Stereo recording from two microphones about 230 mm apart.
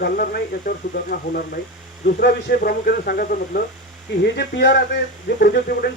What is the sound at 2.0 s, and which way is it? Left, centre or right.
Speech, left.